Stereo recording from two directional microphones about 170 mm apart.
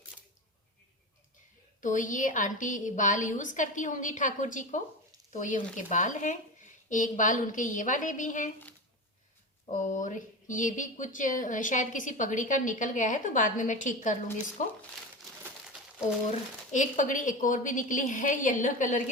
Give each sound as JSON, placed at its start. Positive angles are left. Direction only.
{"t": 1.8, "sound": "speech", "side_deg": 50}
{"t": 9.6, "sound": "speech", "side_deg": 50}
{"t": 15.2, "sound": "crumpling", "side_deg": -5}
{"t": 16.7, "sound": "speech", "side_deg": 50}